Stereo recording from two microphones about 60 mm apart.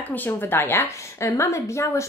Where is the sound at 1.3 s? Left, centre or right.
Left.